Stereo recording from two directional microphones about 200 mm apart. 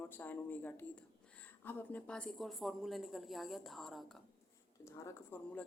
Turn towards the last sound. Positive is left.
turn(degrees=10)  # may be behind; listen again after turning